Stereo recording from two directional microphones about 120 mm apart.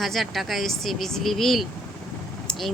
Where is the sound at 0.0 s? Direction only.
Centre (ahead or behind).